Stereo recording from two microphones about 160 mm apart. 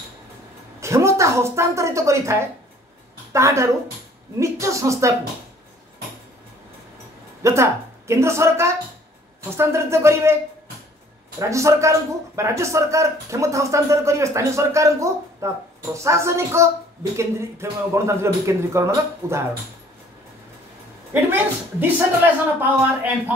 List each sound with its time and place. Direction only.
0.7 s a woman's voice: 20° right (ahead or behind)
3.3 s speech: 20° right (ahead or behind)
7.4 s speech: 15° right (ahead or behind)
11.3 s speech: 20° right (ahead or behind)
21.1 s speech: 10° right (ahead or behind)